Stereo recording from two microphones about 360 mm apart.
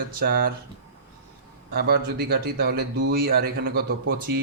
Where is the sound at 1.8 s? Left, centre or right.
Right.